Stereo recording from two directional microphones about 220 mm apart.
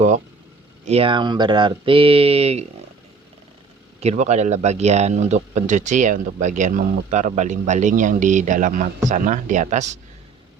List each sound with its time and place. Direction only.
0.9 s speech: 25° right (ahead or behind)
4.0 s speech: 30° right (ahead or behind)